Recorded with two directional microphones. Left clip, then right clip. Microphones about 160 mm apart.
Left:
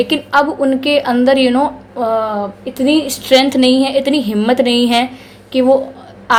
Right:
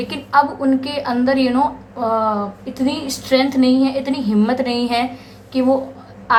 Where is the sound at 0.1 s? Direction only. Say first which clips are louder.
Left 3 dB; 30° left (ahead or behind).